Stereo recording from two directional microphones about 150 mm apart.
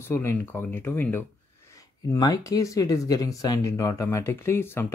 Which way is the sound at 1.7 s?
25° left (ahead or behind).